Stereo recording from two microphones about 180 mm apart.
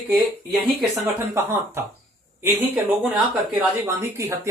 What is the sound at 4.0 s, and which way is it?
Speech, 15° right (ahead or behind).